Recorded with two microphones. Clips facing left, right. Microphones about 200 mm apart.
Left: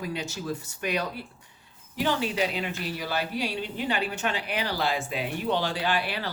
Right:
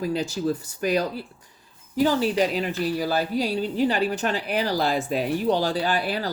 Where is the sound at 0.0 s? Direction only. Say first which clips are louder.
Right 8 dB; 35° right (ahead or behind).